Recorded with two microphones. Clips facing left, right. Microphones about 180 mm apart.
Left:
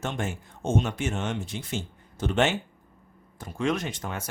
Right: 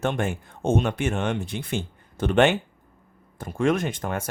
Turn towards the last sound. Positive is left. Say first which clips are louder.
# right 6 dB
turn(degrees=-55)  # may be behind; listen again after turning